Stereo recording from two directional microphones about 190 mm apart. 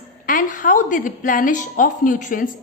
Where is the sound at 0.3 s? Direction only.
45° left (ahead or behind).